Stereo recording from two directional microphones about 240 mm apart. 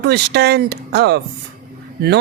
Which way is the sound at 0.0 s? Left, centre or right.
Right.